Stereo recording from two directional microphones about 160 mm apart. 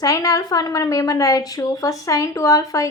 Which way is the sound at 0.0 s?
20° left (ahead or behind).